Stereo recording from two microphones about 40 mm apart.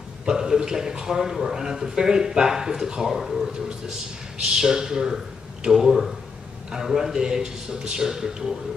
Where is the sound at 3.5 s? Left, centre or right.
Right.